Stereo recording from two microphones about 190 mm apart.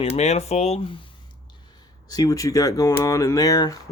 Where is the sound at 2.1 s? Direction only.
20° left (ahead or behind).